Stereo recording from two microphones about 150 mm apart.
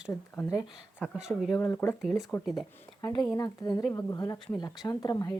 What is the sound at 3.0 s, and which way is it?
Speech, 20° left (ahead or behind).